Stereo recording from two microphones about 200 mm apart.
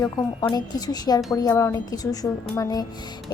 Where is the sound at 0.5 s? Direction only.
20° left (ahead or behind).